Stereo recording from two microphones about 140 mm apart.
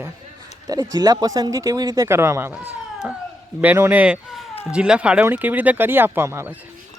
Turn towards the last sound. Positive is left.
turn(degrees=-20)  # may be behind; listen again after turning